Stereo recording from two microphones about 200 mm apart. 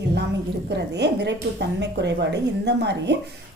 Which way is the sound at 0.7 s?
60° right (ahead or behind).